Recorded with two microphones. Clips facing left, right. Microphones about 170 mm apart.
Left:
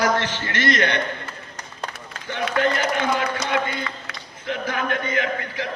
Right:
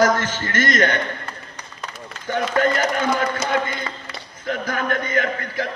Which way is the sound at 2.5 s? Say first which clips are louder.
Right 2 dB; 45° right (ahead or behind).